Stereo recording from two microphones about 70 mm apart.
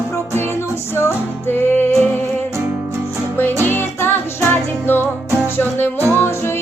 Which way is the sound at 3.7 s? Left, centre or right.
Left.